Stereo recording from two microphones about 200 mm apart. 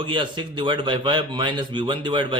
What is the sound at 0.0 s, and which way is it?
Speech, 25° right (ahead or behind).